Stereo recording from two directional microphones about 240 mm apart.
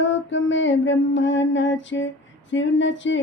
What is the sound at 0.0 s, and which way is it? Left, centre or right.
Female singing, left.